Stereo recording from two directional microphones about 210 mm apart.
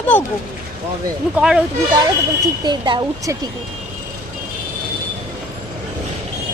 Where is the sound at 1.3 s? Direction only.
5° right (ahead or behind).